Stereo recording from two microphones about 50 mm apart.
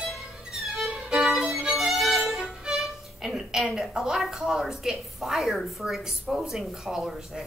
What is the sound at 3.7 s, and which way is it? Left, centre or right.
A woman's voice, centre.